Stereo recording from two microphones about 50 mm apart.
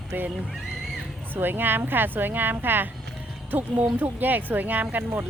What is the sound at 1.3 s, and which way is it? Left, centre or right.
A woman's voice, right.